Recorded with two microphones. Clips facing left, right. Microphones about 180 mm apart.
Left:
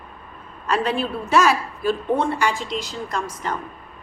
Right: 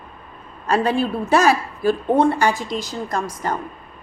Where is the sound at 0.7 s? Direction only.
35° right (ahead or behind).